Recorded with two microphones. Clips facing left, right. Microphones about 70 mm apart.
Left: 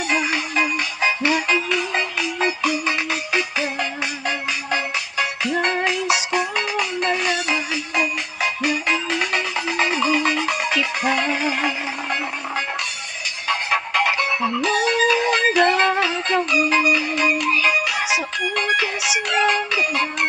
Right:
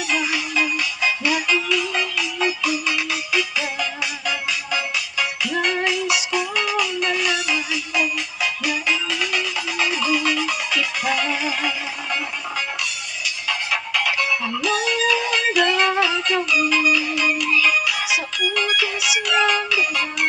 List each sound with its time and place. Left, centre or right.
0.1 s music: left